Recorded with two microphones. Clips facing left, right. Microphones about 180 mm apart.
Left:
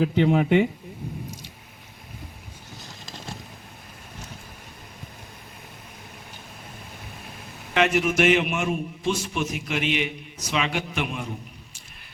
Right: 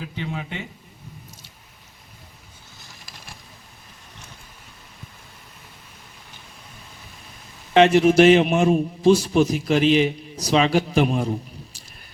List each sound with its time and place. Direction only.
0.2 s speech: 65° left (ahead or behind)
2.8 s vehicle: 20° left (ahead or behind)
7.7 s a man's voice: 30° right (ahead or behind)